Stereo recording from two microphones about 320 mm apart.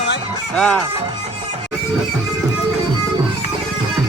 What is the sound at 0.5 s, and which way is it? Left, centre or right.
Music, centre.